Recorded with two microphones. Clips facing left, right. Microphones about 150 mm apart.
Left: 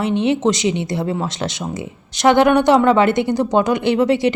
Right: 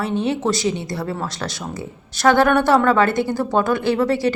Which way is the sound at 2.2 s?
20° left (ahead or behind).